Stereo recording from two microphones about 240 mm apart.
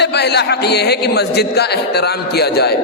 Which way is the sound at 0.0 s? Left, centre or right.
Left.